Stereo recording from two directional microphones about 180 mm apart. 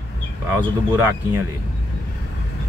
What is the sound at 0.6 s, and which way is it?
Speech, 10° right (ahead or behind).